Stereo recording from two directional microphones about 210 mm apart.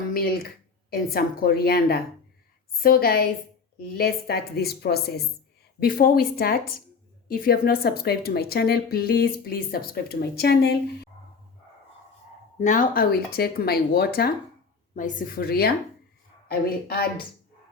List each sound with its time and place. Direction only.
0.9 s a woman's voice: 45° left (ahead or behind)
12.5 s a woman's voice: 35° left (ahead or behind)